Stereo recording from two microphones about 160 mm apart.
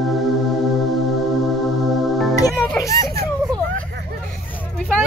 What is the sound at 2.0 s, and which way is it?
Music, centre (ahead or behind).